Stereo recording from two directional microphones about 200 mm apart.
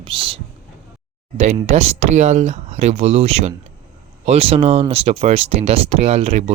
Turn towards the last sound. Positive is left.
turn(degrees=-30)  # may be behind; listen again after turning